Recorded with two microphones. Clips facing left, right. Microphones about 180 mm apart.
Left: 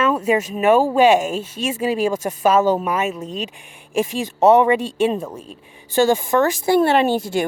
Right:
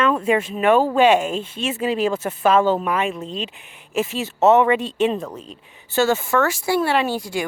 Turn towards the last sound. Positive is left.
turn(degrees=25)  # may be behind; listen again after turning